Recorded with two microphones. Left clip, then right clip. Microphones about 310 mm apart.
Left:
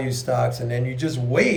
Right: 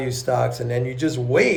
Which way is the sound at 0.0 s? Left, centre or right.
Centre.